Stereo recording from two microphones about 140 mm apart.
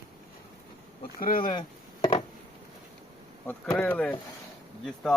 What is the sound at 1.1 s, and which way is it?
Speech, 90° left.